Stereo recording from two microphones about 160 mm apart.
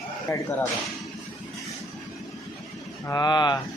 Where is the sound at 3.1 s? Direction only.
25° left (ahead or behind).